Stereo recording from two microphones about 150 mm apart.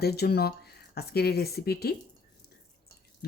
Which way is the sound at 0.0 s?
90° left.